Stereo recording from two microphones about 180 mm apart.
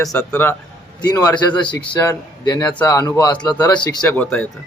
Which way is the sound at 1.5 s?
25° left (ahead or behind).